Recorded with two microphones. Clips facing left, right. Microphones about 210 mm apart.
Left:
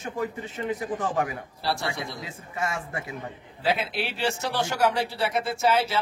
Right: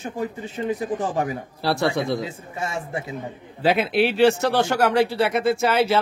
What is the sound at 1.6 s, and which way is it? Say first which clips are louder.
Speech: right 7 dB; 65° right (ahead or behind).